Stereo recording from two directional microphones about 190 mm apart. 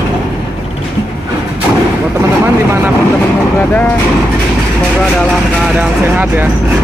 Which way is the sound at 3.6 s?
10° left (ahead or behind).